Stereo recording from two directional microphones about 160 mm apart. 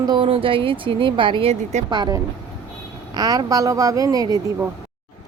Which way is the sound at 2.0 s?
20° right (ahead or behind).